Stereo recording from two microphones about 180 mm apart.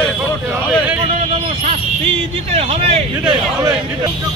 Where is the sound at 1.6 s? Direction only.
30° right (ahead or behind).